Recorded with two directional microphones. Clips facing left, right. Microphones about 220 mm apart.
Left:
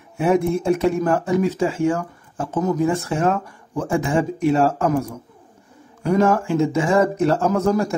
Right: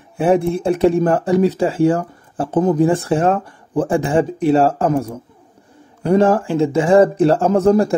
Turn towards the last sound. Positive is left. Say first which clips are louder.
# right 5 dB
turn(degrees=-30)  # may be behind; listen again after turning